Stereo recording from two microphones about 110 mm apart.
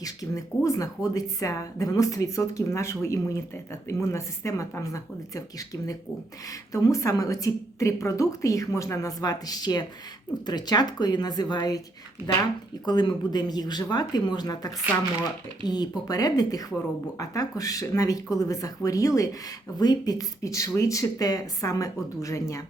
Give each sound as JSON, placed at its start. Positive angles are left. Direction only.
{"t": 0.0, "sound": "speech", "side_deg": 35}
{"t": 12.8, "sound": "speech", "side_deg": 40}